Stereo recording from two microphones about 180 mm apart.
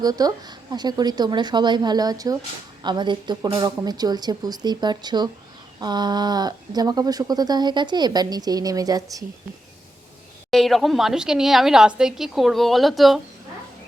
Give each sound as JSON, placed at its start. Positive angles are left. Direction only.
{"t": 0.0, "sound": "speech", "side_deg": -20}
{"t": 10.5, "sound": "a woman's voice", "side_deg": 0}